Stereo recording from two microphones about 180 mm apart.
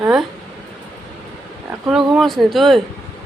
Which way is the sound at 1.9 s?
Centre (ahead or behind).